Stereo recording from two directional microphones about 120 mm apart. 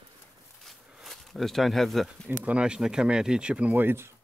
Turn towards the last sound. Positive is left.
turn(degrees=-20)  # may be behind; listen again after turning